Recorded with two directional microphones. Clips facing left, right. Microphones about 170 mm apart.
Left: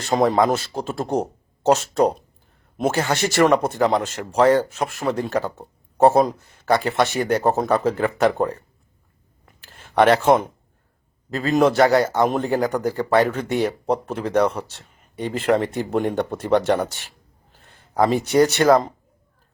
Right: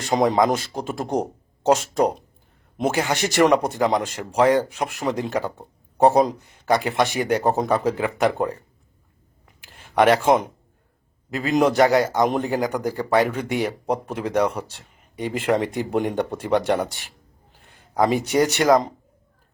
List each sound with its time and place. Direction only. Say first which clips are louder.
0.0 s speech: left 1 dB; 15° right (ahead or behind)
9.6 s speech: left 1 dB; 10° right (ahead or behind)
11.5 s speech: left 1 dB; 15° right (ahead or behind)